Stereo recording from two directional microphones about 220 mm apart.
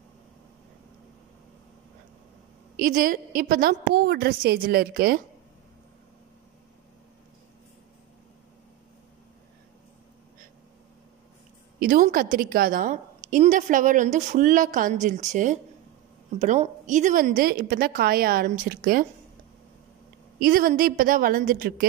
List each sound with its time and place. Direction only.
2.8 s a woman's voice: 40° right (ahead or behind)
11.8 s a woman's voice: 40° right (ahead or behind)
20.3 s a woman's voice: 40° right (ahead or behind)